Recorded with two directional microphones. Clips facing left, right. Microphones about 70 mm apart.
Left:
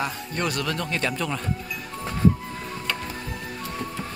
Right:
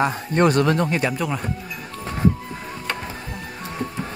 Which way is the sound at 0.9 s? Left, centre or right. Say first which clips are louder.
Right 4 dB; centre.